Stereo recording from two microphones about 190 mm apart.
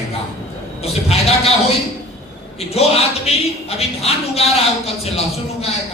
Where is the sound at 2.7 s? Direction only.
30° left (ahead or behind).